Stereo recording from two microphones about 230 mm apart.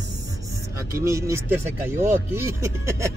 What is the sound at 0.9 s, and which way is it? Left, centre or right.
Speech, centre.